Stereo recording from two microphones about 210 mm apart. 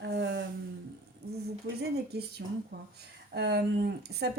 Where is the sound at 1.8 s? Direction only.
50° right (ahead or behind).